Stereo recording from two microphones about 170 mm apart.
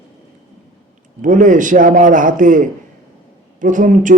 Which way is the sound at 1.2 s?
50° right (ahead or behind).